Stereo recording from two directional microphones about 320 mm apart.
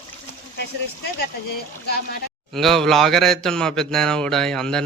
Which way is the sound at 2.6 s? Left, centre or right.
Centre.